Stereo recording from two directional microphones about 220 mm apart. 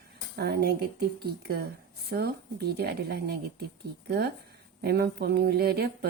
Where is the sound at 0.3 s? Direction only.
45° right (ahead or behind).